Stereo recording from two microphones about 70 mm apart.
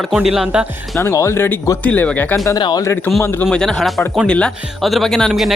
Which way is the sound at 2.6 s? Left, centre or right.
Left.